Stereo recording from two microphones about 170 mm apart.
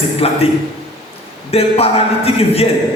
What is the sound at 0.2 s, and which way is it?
Speech, 35° left (ahead or behind).